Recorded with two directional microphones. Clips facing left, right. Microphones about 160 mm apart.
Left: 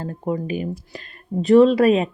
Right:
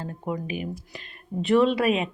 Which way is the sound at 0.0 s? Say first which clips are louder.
Left 6 dB; 35° left (ahead or behind).